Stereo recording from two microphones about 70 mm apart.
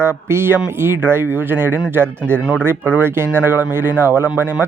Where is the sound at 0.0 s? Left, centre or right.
Right.